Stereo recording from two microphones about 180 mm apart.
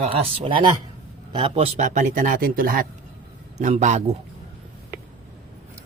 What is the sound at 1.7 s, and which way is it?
Speech, 40° right (ahead or behind).